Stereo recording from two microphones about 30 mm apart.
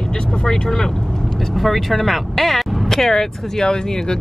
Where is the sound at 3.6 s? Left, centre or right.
Left.